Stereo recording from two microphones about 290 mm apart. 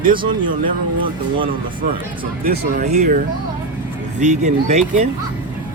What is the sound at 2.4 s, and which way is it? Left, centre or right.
Speech, right.